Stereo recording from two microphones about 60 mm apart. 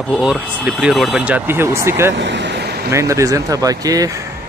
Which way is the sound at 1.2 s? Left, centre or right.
Right.